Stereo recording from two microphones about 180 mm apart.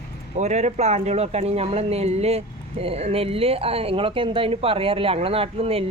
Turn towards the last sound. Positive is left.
turn(degrees=-35)  # may be behind; listen again after turning